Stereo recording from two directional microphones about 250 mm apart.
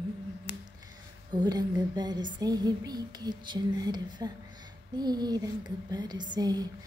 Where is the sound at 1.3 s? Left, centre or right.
Centre.